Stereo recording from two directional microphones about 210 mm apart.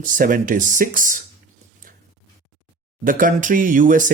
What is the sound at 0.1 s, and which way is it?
Speech, 40° right (ahead or behind).